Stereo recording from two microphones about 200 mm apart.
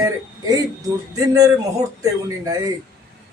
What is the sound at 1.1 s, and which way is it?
Speech, 15° right (ahead or behind).